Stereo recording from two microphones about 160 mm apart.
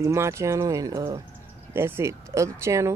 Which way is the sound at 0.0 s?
15° right (ahead or behind).